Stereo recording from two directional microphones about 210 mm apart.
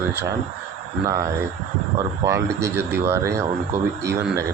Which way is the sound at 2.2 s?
15° right (ahead or behind).